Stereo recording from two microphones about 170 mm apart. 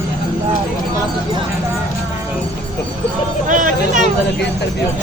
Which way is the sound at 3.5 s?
50° right (ahead or behind).